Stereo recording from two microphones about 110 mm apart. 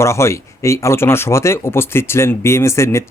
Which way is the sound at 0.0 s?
25° left (ahead or behind).